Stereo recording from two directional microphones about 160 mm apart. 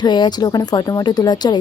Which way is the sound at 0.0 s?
25° left (ahead or behind).